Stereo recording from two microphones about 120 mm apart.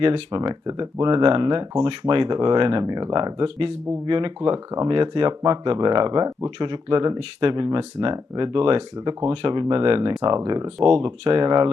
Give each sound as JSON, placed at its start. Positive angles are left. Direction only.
{"t": 0.0, "sound": "speech", "side_deg": -40}
{"t": 10.8, "sound": "speech", "side_deg": -45}